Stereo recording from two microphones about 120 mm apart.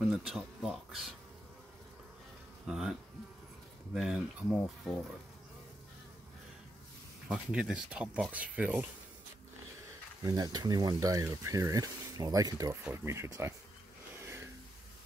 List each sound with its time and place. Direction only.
0.0 s speech: 5° right (ahead or behind)
2.6 s speech: 5° right (ahead or behind)
7.2 s speech: 5° right (ahead or behind)
10.2 s speech: 30° right (ahead or behind)
14.2 s a sound: 20° right (ahead or behind)